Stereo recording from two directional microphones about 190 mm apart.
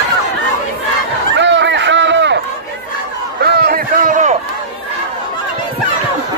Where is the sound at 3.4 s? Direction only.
55° right (ahead or behind).